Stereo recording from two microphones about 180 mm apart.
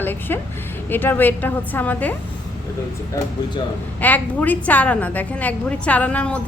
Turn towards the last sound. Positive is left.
turn(degrees=10)  # may be behind; listen again after turning